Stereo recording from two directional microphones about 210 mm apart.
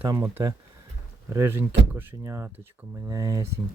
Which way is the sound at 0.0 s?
15° right (ahead or behind).